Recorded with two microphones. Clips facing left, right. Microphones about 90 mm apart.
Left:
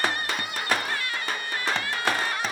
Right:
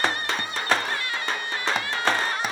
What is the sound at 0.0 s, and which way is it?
Music, 30° right (ahead or behind).